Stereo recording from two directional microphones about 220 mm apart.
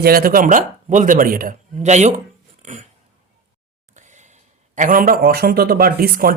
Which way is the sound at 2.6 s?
35° right (ahead or behind).